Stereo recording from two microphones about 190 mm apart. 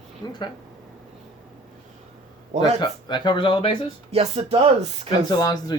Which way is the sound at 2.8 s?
25° left (ahead or behind).